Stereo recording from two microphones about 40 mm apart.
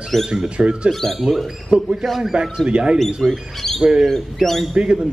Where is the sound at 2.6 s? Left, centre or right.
Right.